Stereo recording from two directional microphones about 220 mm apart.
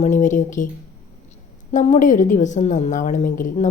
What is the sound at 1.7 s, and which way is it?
A woman's voice, 35° left (ahead or behind).